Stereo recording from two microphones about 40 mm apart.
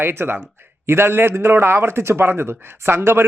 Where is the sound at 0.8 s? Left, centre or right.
Right.